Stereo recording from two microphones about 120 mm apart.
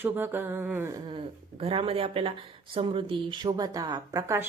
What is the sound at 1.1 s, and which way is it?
Speech, 50° right (ahead or behind).